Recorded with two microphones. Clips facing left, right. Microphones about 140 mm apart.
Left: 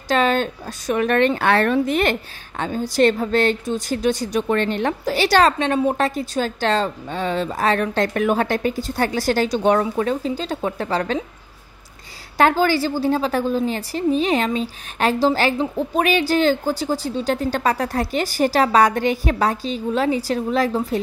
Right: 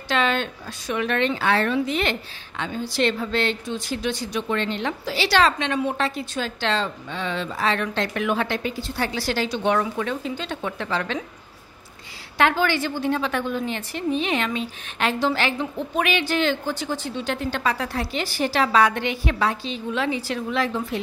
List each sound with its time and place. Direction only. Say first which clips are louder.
0.1 s a woman's voice: left 4 dB; 40° left (ahead or behind)
12.4 s a woman's voice: left 4 dB; 40° left (ahead or behind)